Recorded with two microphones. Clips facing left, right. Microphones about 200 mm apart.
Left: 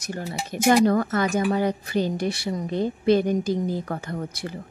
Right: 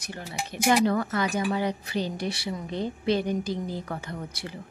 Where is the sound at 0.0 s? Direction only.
45° left (ahead or behind).